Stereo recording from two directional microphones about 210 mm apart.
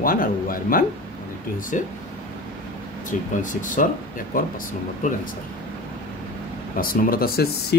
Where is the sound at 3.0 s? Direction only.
40° left (ahead or behind).